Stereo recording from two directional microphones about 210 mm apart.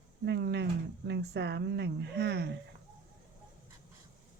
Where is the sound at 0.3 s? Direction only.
50° right (ahead or behind).